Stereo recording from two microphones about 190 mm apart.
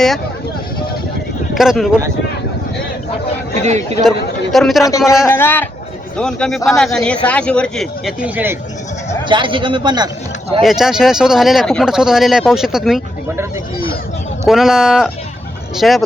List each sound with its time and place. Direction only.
1.5 s speech: centre (ahead or behind)
3.6 s speech: 40° right (ahead or behind)
4.5 s speech: centre (ahead or behind)
4.8 s a man's voice: 15° left (ahead or behind); by 8.5 s 10° right (ahead or behind)
9.2 s a man's voice: 25° right (ahead or behind)
10.6 s speech: centre (ahead or behind)
14.4 s speech: centre (ahead or behind)